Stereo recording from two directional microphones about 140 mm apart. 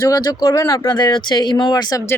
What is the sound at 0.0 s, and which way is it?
Speech, 25° left (ahead or behind).